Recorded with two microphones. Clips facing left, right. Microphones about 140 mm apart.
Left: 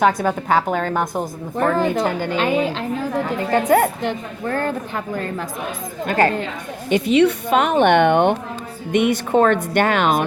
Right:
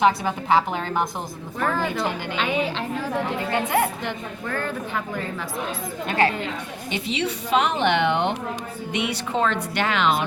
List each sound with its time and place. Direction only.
0.0 s a woman's voice: 45° left (ahead or behind)
6.1 s a woman's voice: 45° left (ahead or behind)